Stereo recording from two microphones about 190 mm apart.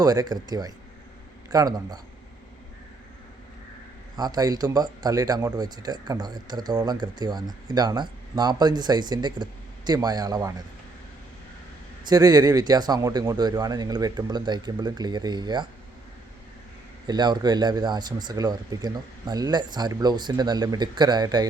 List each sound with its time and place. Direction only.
0.0 s speech: 20° right (ahead or behind)
4.2 s speech: 20° right (ahead or behind)
12.0 s speech: 20° right (ahead or behind)
17.1 s speech: 20° right (ahead or behind)